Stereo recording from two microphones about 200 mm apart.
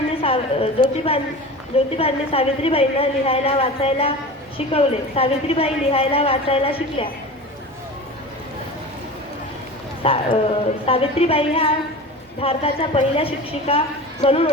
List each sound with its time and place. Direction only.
0.2 s a woman's voice: 30° left (ahead or behind)
10.0 s a woman's voice: 25° left (ahead or behind)